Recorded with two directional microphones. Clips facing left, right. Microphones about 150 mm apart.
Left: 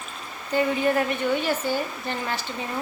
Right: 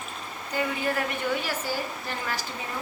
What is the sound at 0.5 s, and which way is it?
Speech, 30° left (ahead or behind).